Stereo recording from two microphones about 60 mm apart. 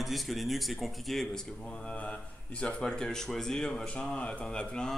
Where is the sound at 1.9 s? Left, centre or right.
Centre.